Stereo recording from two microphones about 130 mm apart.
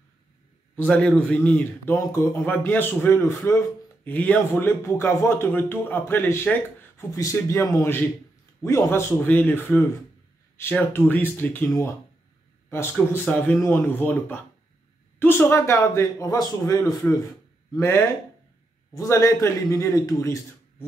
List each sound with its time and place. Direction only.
0.7 s a man's voice: 10° left (ahead or behind)
12.6 s a sound: 20° left (ahead or behind)
13.5 s a man's voice: 15° left (ahead or behind)